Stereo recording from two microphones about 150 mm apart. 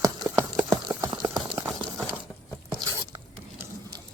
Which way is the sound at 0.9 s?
15° right (ahead or behind).